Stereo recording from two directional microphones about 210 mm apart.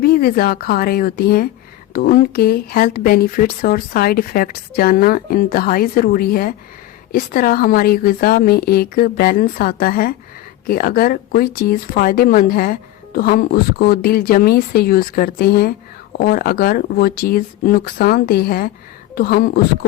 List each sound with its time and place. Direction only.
0.0 s speech: 45° left (ahead or behind)